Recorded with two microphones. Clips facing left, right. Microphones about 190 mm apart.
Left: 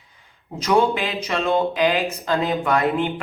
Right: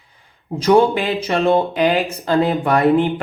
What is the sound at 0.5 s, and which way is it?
Speech, 35° right (ahead or behind).